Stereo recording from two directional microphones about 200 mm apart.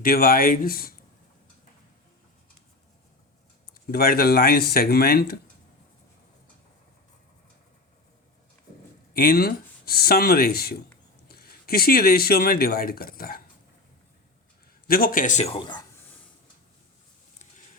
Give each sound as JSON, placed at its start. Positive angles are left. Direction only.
{"t": 0.0, "sound": "speech", "side_deg": 45}
{"t": 3.9, "sound": "speech", "side_deg": 50}
{"t": 9.1, "sound": "speech", "side_deg": 50}
{"t": 14.8, "sound": "speech", "side_deg": 45}